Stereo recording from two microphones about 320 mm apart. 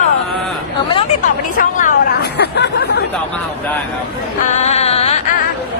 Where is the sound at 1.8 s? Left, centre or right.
Left.